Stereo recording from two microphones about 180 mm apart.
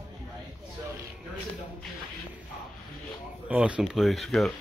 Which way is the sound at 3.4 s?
5° right (ahead or behind).